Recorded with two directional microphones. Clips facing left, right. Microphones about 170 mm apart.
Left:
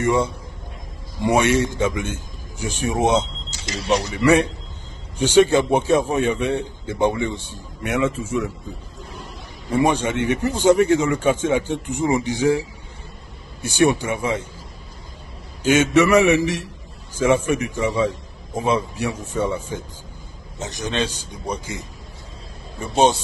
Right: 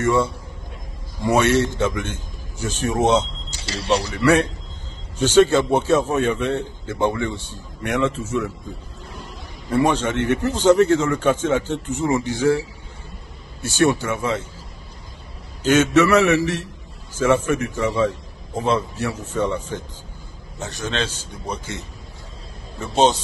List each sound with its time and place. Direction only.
0.0 s a man's voice: 15° left (ahead or behind)
3.4 s speech: 30° right (ahead or behind)
4.2 s a man's voice: 10° left (ahead or behind)
9.7 s a man's voice: 10° left (ahead or behind)
15.6 s a man's voice: 10° left (ahead or behind)
22.8 s a man's voice: 10° left (ahead or behind)